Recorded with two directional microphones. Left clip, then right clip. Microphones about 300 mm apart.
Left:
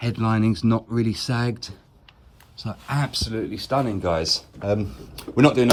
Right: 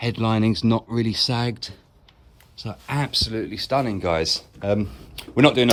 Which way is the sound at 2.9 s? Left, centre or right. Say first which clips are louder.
Right 3 dB; centre.